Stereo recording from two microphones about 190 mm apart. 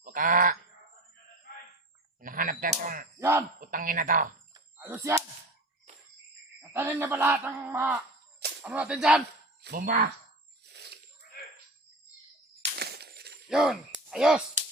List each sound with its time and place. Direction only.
0.0 s goose: 45° right (ahead or behind)
2.2 s speech: 45° right (ahead or behind)
3.2 s speech: 15° right (ahead or behind)
3.6 s speech: 45° right (ahead or behind)
4.5 s a sound: 15° right (ahead or behind)
6.6 s speech: 15° right (ahead or behind)
9.6 s speech: 55° right (ahead or behind)
10.7 s a sound: 60° right (ahead or behind)
12.7 s a sound: 55° right (ahead or behind)
13.5 s speech: centre (ahead or behind)